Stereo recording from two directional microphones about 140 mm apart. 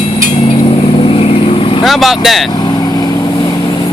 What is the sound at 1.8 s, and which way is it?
Speech, centre (ahead or behind).